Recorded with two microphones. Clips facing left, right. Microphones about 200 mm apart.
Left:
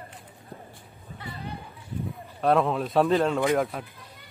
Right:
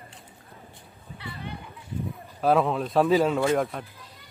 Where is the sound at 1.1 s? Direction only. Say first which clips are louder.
Even; 40° left (ahead or behind).